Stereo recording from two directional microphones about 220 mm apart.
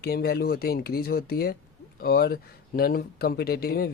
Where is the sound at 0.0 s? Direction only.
45° left (ahead or behind).